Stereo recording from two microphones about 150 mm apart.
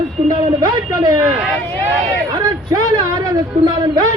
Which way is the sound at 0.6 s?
25° right (ahead or behind).